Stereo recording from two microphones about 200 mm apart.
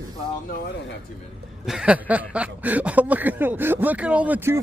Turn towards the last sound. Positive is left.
turn(degrees=-10)  # may be behind; listen again after turning